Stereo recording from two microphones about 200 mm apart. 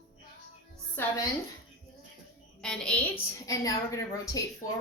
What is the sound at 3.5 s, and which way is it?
Speech, 15° left (ahead or behind).